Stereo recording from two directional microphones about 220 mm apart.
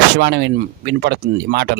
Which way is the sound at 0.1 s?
50° right (ahead or behind).